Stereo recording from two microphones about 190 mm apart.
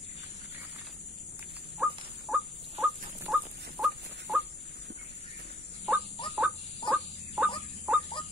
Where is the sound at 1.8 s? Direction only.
5° right (ahead or behind).